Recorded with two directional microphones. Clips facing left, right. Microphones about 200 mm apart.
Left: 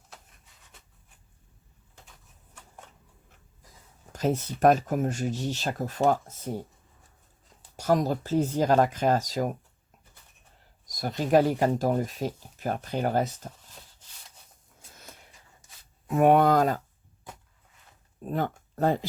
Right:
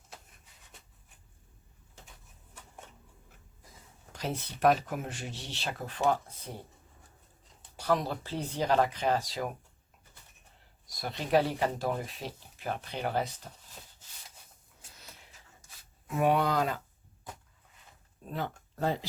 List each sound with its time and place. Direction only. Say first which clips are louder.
4.1 s speech: left 9 dB; 45° left (ahead or behind)
7.8 s speech: left 5 dB; 45° left (ahead or behind)
10.8 s speech: left 7 dB; 40° left (ahead or behind)
14.9 s a sound: left 5 dB; 50° left (ahead or behind)
16.0 s speech: left 7 dB; 55° left (ahead or behind)
18.2 s speech: left 7 dB; 50° left (ahead or behind)